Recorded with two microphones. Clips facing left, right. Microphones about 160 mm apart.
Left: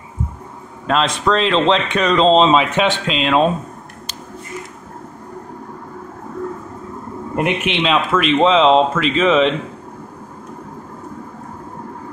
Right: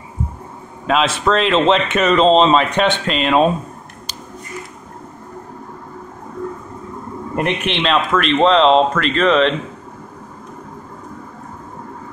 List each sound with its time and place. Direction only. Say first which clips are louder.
0.8 s speech: right 1 dB; 5° right (ahead or behind)
7.3 s speech: left 1 dB; 5° left (ahead or behind)